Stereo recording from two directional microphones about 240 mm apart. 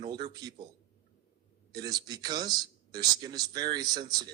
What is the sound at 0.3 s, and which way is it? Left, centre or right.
Speech, centre.